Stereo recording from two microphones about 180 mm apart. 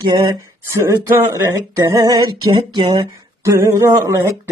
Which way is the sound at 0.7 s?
15° right (ahead or behind).